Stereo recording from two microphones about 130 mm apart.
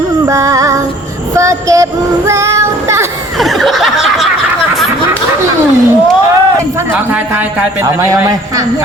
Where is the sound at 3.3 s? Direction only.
Centre (ahead or behind).